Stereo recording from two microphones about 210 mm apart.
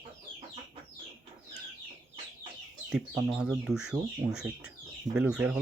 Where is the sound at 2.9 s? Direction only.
Centre (ahead or behind).